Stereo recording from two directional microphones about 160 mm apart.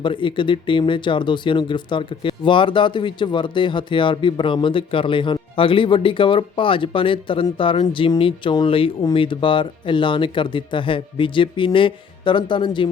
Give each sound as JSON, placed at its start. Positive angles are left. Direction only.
{"t": 0.0, "sound": "speech", "side_deg": 30}